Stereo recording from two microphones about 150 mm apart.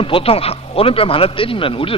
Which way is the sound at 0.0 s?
40° left (ahead or behind).